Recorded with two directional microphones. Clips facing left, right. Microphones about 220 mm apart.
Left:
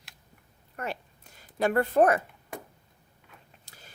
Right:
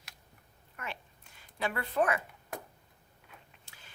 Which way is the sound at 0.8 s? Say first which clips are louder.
Left 8 dB; 40° left (ahead or behind).